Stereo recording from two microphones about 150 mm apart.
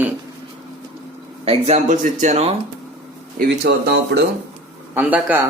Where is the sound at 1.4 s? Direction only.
45° right (ahead or behind).